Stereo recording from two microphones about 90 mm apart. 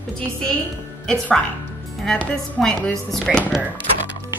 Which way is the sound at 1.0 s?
10° left (ahead or behind).